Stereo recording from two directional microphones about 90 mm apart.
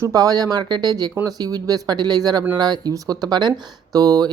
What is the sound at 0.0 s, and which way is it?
Speech, 40° right (ahead or behind).